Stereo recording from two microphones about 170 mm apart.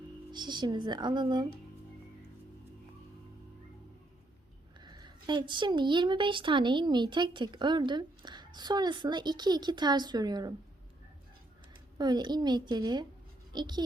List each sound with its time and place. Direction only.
0.3 s a woman's voice: 25° right (ahead or behind)
4.8 s a woman's voice: 25° right (ahead or behind)
11.9 s a woman's voice: 25° right (ahead or behind)